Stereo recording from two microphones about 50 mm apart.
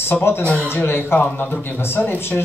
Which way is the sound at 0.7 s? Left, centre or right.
Left.